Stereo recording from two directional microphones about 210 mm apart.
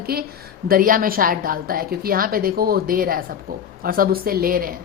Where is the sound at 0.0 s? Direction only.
45° right (ahead or behind).